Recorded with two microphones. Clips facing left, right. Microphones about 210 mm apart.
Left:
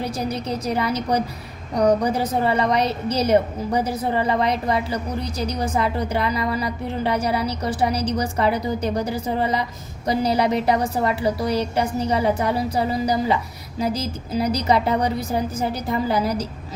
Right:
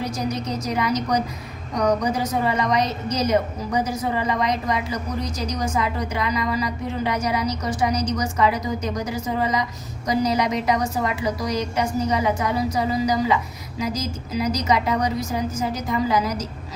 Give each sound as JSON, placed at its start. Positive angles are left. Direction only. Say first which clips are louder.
{"t": 0.7, "sound": "a woman's voice", "louder": "even", "side_deg": 30}
{"t": 5.2, "sound": "a woman's voice", "louder": "left 1 dB", "side_deg": 60}
{"t": 5.7, "sound": "a woman's voice", "louder": "left 2 dB", "side_deg": 30}